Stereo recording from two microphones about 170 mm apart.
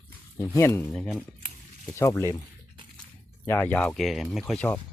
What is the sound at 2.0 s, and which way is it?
Speech, 15° left (ahead or behind).